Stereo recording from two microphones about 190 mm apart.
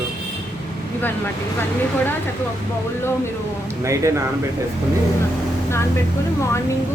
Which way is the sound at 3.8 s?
15° right (ahead or behind).